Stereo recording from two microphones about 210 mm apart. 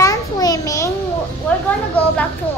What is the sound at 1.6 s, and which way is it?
Speech, 5° left (ahead or behind).